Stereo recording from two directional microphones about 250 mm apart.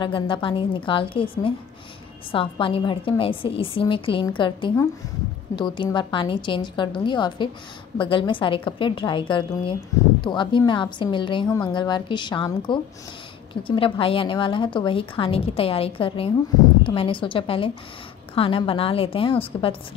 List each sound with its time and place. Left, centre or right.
0.0 s a woman's voice: centre